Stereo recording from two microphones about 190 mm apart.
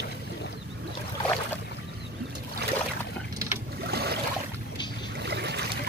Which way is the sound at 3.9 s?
55° right (ahead or behind).